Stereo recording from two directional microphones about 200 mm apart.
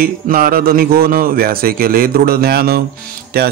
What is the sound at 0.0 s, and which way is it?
Mantra, 45° right (ahead or behind).